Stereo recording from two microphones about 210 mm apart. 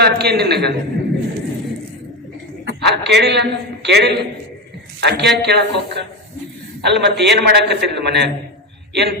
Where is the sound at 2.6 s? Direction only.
55° right (ahead or behind).